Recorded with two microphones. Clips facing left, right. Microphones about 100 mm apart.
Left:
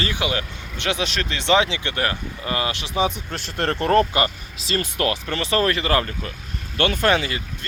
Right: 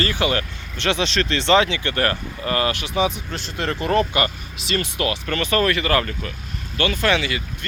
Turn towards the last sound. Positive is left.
turn(degrees=40)  # may be behind; listen again after turning